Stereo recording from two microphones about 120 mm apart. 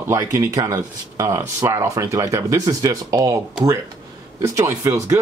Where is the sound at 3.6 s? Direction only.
5° right (ahead or behind).